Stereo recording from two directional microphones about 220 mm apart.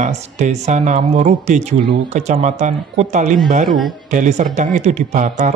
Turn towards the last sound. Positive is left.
turn(degrees=-35)  # may be behind; listen again after turning